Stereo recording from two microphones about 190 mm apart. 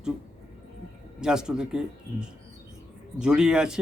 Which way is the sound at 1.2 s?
5° right (ahead or behind).